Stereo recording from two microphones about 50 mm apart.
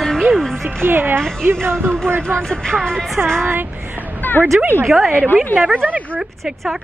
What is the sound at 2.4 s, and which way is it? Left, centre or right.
Speech, centre.